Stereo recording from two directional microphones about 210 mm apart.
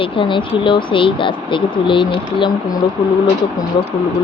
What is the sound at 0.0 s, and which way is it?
Speech, 25° left (ahead or behind).